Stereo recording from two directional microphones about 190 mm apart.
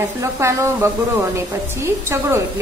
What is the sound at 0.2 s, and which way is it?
A woman's voice, 15° right (ahead or behind).